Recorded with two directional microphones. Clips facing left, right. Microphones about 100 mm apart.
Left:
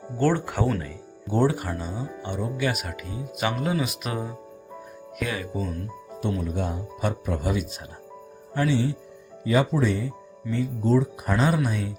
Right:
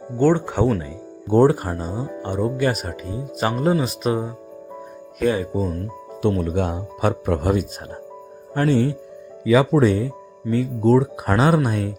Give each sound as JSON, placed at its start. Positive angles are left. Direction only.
{"t": 0.2, "sound": "speech", "side_deg": -20}
{"t": 1.3, "sound": "speech", "side_deg": -50}
{"t": 6.2, "sound": "speech", "side_deg": -65}
{"t": 9.5, "sound": "speech", "side_deg": -80}